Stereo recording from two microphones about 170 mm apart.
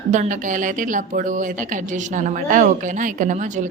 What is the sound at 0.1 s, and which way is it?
A woman's voice, 50° right (ahead or behind).